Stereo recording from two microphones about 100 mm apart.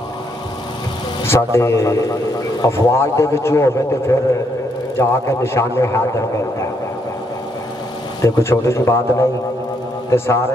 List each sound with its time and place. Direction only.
1.2 s a man's voice: 25° left (ahead or behind)
8.2 s a man's voice: 30° left (ahead or behind)